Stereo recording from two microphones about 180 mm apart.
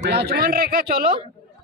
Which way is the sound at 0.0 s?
65° right (ahead or behind).